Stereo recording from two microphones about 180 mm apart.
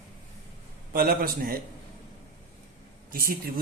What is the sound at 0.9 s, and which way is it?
Speech, 55° right (ahead or behind).